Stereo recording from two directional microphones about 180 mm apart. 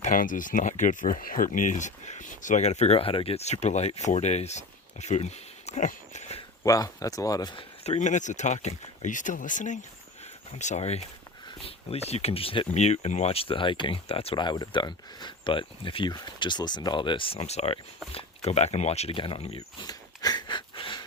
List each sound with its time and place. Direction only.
0.0 s speech: 45° left (ahead or behind)
6.6 s speech: 20° left (ahead or behind)
7.9 s speech: 40° left (ahead or behind)
19.5 s a sound: 20° left (ahead or behind)